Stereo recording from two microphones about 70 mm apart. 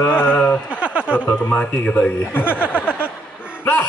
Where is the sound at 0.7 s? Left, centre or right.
Centre.